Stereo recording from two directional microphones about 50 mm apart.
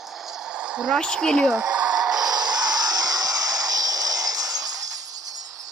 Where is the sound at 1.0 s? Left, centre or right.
Centre.